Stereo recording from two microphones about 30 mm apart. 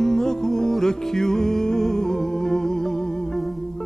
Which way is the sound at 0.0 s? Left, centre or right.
Centre.